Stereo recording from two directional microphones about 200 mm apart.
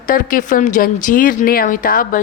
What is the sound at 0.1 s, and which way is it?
A woman's voice, 45° left (ahead or behind).